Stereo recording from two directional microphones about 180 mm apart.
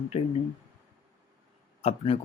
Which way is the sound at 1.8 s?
35° left (ahead or behind).